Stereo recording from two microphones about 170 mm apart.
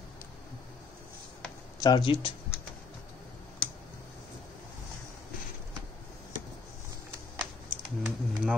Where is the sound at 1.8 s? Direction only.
25° left (ahead or behind).